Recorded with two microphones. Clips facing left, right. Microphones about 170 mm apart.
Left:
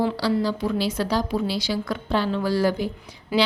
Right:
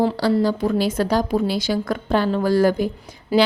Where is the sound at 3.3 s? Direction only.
30° right (ahead or behind).